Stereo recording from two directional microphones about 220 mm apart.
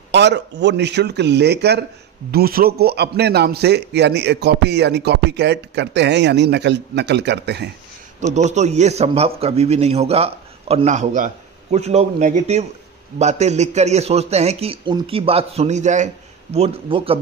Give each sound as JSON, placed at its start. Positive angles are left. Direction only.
{"t": 0.1, "sound": "a man's voice", "side_deg": -50}
{"t": 8.3, "sound": "a man's voice", "side_deg": -30}